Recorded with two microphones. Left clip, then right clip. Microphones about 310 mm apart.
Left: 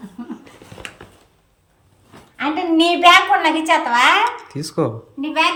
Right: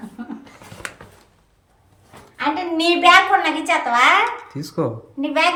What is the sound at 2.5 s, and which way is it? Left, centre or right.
A woman's voice, centre.